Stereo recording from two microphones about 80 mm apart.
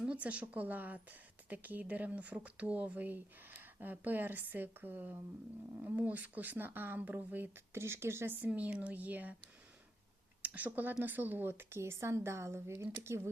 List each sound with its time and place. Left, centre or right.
0.0 s speech: centre; by 8.4 s right
8.4 s speech: centre
10.4 s a woman's voice: centre